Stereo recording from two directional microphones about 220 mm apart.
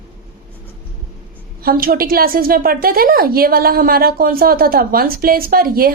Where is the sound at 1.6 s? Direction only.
40° right (ahead or behind).